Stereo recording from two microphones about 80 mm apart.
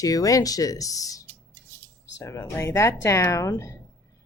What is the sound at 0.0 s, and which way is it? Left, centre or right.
Speech, left.